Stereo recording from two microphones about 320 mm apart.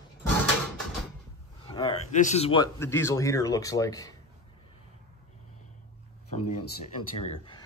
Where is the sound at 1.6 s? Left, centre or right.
Centre.